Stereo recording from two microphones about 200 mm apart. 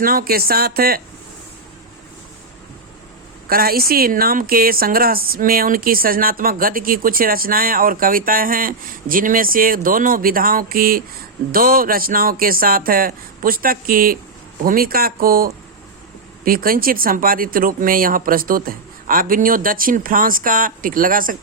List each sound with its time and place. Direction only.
0.0 s speech: 45° right (ahead or behind)
3.5 s speech: 50° right (ahead or behind)